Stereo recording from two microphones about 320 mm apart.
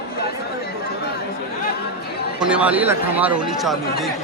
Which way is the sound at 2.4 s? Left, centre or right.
Centre.